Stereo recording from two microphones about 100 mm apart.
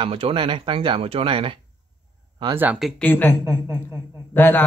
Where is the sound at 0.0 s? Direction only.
65° right (ahead or behind).